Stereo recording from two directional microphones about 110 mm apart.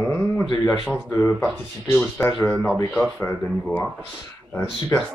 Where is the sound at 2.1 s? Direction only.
20° left (ahead or behind).